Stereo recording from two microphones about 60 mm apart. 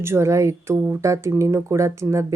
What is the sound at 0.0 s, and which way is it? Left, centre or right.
A woman's voice, right.